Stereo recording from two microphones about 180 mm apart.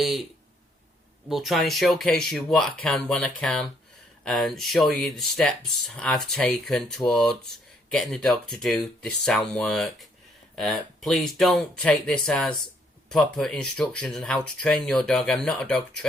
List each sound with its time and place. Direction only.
1.3 s speech: centre (ahead or behind)